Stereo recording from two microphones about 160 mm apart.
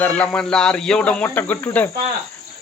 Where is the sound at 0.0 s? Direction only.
10° left (ahead or behind).